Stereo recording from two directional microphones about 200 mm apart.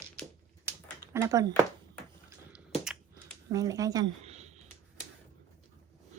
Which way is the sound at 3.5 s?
15° right (ahead or behind).